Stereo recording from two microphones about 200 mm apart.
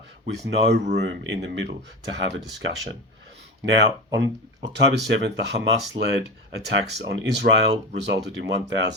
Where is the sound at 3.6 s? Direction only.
60° right (ahead or behind).